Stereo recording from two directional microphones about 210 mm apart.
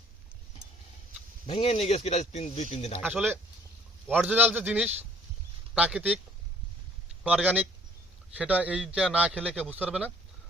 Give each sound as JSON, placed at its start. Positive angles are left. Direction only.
{"t": 1.5, "sound": "speech", "side_deg": 30}
{"t": 3.0, "sound": "a man's voice", "side_deg": -10}
{"t": 7.3, "sound": "a man's voice", "side_deg": -5}